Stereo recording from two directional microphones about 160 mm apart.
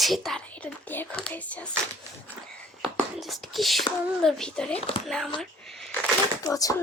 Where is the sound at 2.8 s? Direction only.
Centre (ahead or behind).